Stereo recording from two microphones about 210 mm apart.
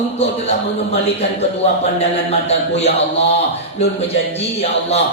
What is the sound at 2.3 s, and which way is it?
Speech, 30° left (ahead or behind).